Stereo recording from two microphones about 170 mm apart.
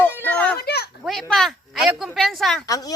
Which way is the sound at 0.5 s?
70° left (ahead or behind).